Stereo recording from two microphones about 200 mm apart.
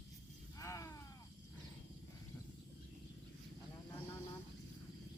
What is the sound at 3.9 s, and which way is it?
Vehicle, 10° left (ahead or behind).